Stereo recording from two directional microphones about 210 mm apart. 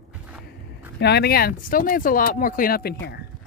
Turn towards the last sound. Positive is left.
turn(degrees=45)  # may be behind; listen again after turning